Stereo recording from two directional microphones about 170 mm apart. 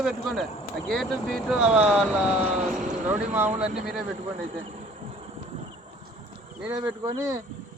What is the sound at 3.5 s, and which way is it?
Speech, 5° right (ahead or behind).